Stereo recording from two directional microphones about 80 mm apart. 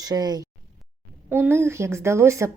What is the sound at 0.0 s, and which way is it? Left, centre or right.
Speech, right.